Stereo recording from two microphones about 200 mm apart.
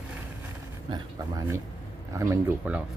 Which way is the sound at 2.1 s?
15° right (ahead or behind).